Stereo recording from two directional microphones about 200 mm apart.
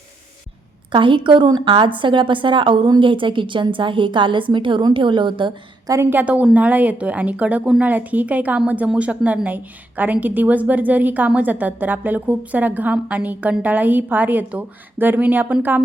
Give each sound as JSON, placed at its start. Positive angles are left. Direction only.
{"t": 0.9, "sound": "a woman's voice", "side_deg": -25}